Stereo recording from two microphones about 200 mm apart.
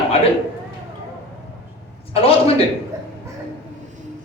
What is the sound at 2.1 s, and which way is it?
Speech, 30° left (ahead or behind).